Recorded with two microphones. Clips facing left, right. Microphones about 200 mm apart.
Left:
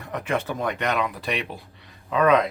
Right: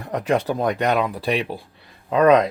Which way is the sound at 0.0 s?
35° right (ahead or behind).